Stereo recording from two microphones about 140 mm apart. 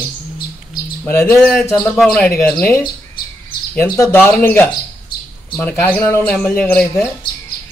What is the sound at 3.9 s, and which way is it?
Speech, 20° left (ahead or behind).